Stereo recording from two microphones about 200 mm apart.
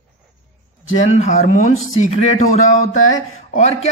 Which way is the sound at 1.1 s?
35° left (ahead or behind).